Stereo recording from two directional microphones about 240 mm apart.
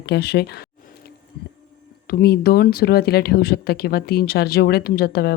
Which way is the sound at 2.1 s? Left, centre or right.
Left.